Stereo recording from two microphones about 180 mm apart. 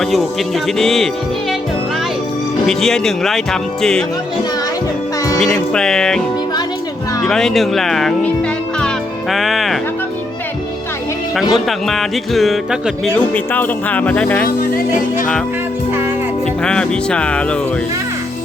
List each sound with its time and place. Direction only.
0.0 s speech: centre (ahead or behind)
2.6 s speech: 5° left (ahead or behind)
5.4 s speech: centre (ahead or behind)
7.3 s speech: centre (ahead or behind)
9.3 s music: centre (ahead or behind)
11.5 s speech: centre (ahead or behind)
14.4 s music: 50° left (ahead or behind)
16.6 s speech: 5° left (ahead or behind)